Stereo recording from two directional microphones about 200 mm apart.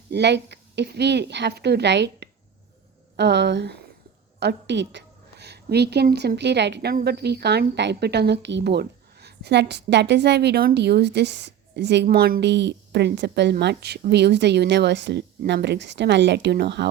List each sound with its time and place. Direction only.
0.1 s a woman's voice: 60° right (ahead or behind)